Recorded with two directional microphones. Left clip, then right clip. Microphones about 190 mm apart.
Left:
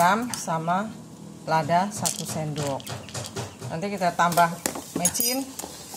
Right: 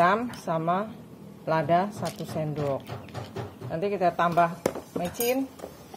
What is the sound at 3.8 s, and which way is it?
Speech, 40° right (ahead or behind).